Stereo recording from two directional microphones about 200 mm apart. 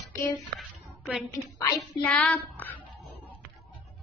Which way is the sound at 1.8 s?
5° left (ahead or behind).